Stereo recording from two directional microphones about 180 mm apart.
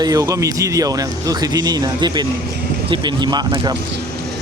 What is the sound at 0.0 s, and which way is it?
Speech, 20° right (ahead or behind).